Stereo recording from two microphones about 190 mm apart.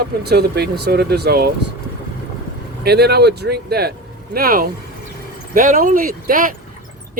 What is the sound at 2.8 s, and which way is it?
Speech, 60° right (ahead or behind).